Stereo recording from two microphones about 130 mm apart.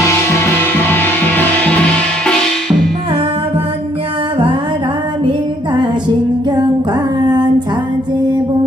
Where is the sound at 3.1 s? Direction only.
45° right (ahead or behind).